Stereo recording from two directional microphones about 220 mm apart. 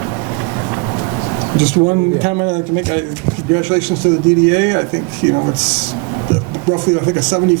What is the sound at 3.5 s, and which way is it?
Speech, 10° right (ahead or behind).